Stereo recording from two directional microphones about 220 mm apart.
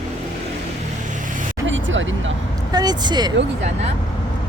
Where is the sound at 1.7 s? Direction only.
60° right (ahead or behind).